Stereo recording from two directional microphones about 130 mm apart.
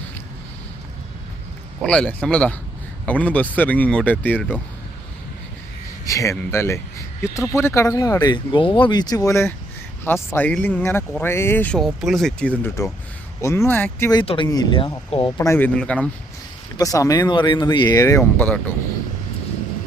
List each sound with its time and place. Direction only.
1.8 s speech: 10° left (ahead or behind)
6.1 s speech: 25° left (ahead or behind)
11.8 s speech: centre (ahead or behind)
13.4 s speech: 25° left (ahead or behind)
14.1 s speech: 40° left (ahead or behind)
15.4 s speech: 20° left (ahead or behind)
16.7 s speech: 25° left (ahead or behind)
17.9 s speech: 25° left (ahead or behind)